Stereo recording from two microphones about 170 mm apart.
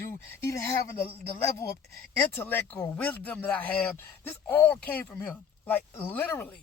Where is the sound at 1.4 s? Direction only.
15° left (ahead or behind).